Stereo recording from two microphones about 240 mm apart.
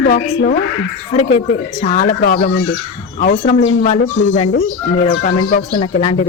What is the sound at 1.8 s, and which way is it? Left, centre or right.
A woman's voice, left.